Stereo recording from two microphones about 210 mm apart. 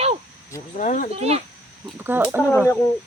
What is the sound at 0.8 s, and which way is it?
Speech, 40° left (ahead or behind).